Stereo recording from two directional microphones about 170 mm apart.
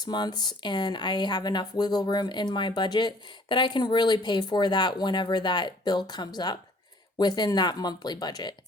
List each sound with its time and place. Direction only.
0.0 s speech: 25° left (ahead or behind)